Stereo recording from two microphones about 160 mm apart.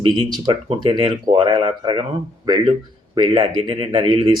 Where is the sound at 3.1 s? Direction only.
30° right (ahead or behind).